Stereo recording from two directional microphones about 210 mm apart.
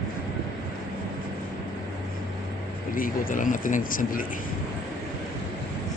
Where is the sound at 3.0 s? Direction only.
40° left (ahead or behind).